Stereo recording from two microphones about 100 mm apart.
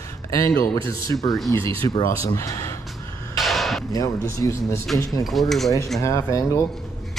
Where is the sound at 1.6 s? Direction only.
65° right (ahead or behind).